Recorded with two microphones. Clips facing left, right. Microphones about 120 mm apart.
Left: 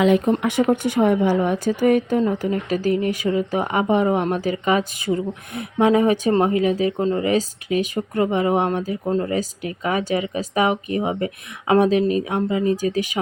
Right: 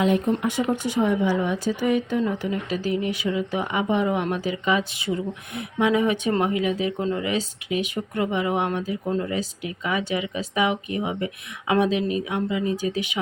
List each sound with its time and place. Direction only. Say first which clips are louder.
0.0 s speech: left 4 dB; 80° left; by 13.1 s 40° left (ahead or behind)